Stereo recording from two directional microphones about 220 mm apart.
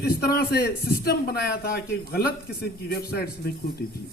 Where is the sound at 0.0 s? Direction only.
45° left (ahead or behind).